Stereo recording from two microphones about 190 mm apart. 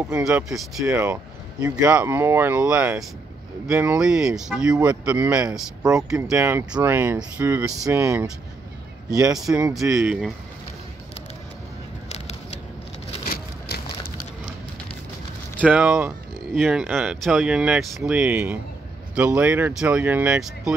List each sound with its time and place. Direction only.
0.1 s speech: 10° right (ahead or behind)
9.5 s speech: 5° right (ahead or behind)
12.1 s a sound: 35° left (ahead or behind)
13.2 s vehicle: 50° left (ahead or behind)
15.6 s speech: 5° right (ahead or behind)